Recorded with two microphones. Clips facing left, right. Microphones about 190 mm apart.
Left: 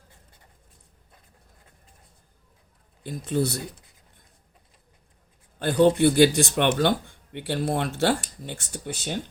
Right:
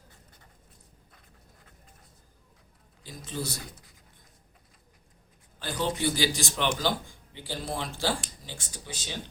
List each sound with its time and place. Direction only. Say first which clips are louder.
3.0 s speech: left 10 dB; 60° left (ahead or behind)
5.5 s speech: left 12 dB; 60° left (ahead or behind)